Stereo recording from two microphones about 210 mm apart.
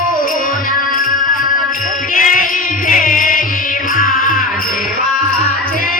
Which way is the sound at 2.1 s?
40° left (ahead or behind).